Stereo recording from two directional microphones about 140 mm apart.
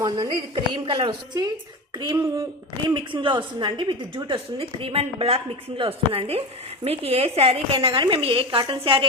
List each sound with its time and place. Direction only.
0.0 s a woman's voice: 35° right (ahead or behind)